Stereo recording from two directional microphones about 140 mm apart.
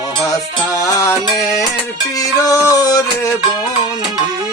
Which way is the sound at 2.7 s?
25° left (ahead or behind).